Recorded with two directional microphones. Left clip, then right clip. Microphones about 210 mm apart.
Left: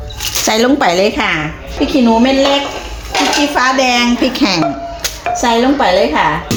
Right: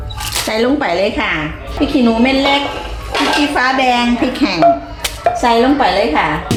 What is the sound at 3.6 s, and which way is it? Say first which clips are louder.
Speech: left 2 dB; 35° left (ahead or behind).